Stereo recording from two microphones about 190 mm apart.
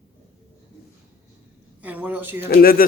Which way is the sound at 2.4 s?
50° left (ahead or behind).